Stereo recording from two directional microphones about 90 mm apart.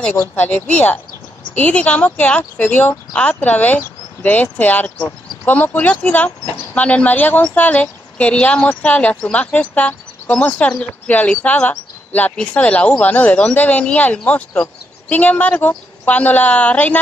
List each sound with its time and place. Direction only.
0.4 s speech: 15° left (ahead or behind)